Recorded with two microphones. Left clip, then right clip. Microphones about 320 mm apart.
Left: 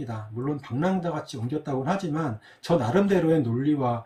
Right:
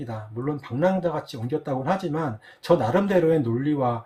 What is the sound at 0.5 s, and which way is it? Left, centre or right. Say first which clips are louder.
Speech: right 5 dB; centre.